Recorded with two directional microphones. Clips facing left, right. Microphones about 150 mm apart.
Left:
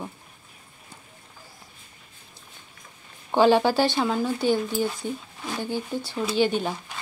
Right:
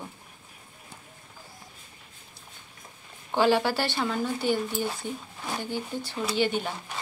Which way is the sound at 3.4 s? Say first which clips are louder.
Left 5 dB; 20° left (ahead or behind).